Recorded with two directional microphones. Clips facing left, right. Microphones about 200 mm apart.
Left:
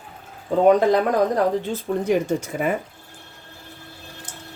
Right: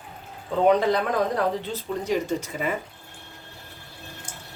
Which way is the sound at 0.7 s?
45° left (ahead or behind).